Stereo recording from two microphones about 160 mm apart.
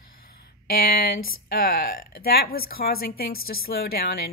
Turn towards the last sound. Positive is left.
turn(degrees=75)  # may be behind; listen again after turning